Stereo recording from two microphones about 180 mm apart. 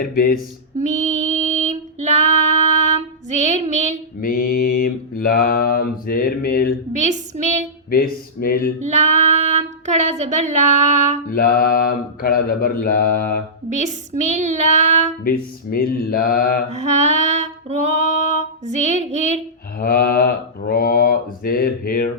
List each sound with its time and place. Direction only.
0.0 s speech: 55° left (ahead or behind)
0.8 s female singing: 40° right (ahead or behind)
4.2 s mantra: 50° left (ahead or behind)
6.9 s child singing: 40° right (ahead or behind)
7.9 s speech: 55° left (ahead or behind)
8.8 s child singing: 40° right (ahead or behind)
11.3 s speech: 55° left (ahead or behind)
13.7 s child singing: 40° right (ahead or behind)
15.2 s mantra: 55° left (ahead or behind)
16.6 s female singing: 40° right (ahead or behind)
19.8 s speech: 55° left (ahead or behind)